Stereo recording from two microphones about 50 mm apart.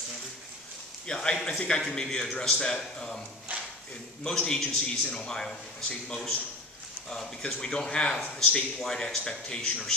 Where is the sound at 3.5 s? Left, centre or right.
Right.